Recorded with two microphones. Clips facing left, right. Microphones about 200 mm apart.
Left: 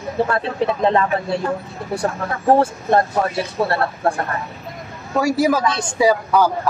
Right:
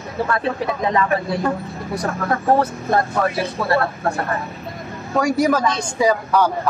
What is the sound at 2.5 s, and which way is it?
Speech, 25° left (ahead or behind).